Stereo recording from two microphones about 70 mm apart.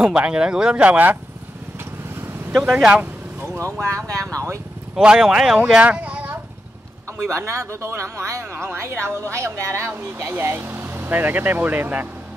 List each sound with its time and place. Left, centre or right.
0.0 s speech: centre
0.8 s speech: right
2.5 s speech: centre
4.3 s speech: right
4.9 s speech: centre
5.7 s speech: centre
7.2 s speech: right